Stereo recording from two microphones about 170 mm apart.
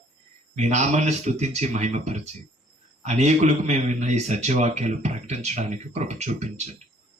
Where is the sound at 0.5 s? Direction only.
40° right (ahead or behind).